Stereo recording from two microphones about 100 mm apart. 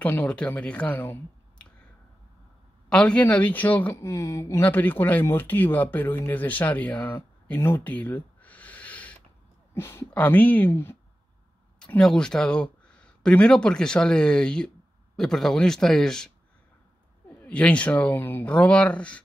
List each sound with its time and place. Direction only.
0.0 s speech: 15° left (ahead or behind)
2.9 s speech: 10° left (ahead or behind); by 4.6 s 30° left (ahead or behind)
4.6 s speech: 20° left (ahead or behind)
12.0 s a man's voice: 5° left (ahead or behind)
17.4 s speech: 10° left (ahead or behind)